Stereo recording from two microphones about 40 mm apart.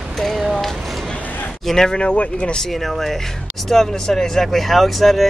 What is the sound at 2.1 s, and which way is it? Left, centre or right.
Speech, left.